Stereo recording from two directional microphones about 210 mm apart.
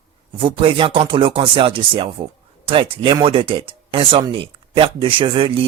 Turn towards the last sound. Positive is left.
turn(degrees=-25)  # may be behind; listen again after turning